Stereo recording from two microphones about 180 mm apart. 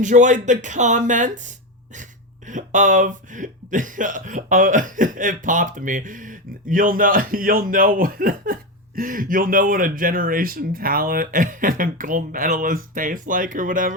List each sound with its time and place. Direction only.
0.0 s speech: 45° right (ahead or behind)